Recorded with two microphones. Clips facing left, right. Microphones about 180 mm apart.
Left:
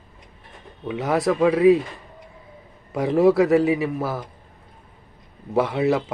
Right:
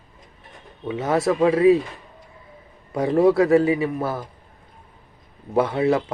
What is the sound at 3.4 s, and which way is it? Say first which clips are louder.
Speech: right 1 dB; centre (ahead or behind).